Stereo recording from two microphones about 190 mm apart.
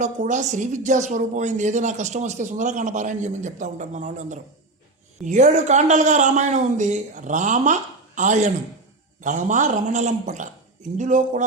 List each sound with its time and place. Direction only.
0.0 s a woman's voice: 40° right (ahead or behind)